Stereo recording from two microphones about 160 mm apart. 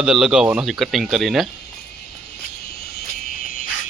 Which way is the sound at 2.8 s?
70° left (ahead or behind).